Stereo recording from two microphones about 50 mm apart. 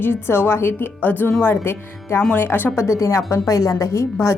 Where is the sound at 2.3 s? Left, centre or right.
Left.